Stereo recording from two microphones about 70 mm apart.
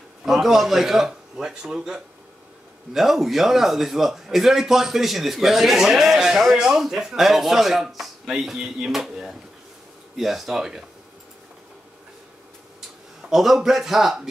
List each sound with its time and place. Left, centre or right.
0.2 s speech: centre
13.2 s speech: centre